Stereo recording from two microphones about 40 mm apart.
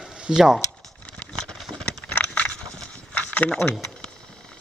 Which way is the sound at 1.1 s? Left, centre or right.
Left.